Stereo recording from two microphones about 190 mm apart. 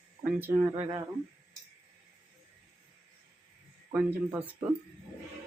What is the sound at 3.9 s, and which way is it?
Speech, 10° right (ahead or behind).